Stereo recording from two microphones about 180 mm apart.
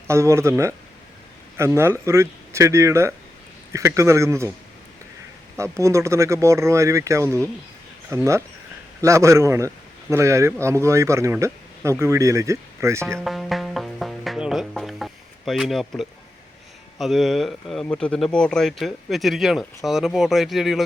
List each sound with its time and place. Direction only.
0.1 s a man's voice: 15° right (ahead or behind)
5.5 s a man's voice: 15° right (ahead or behind)
13.1 s music: centre (ahead or behind)
17.0 s speech: centre (ahead or behind)